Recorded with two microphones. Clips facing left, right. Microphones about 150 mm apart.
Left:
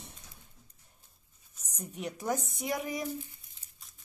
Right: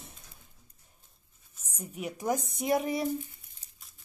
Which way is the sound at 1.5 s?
5° right (ahead or behind).